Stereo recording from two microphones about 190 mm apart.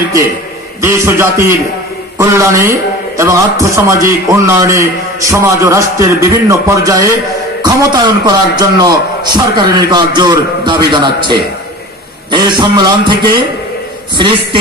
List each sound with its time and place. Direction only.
0.7 s a man's voice: 15° right (ahead or behind)